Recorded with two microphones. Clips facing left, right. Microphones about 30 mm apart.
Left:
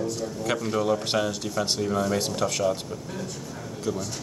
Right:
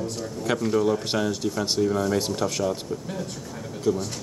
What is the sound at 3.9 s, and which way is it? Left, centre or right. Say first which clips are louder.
Speech: right 5 dB; centre.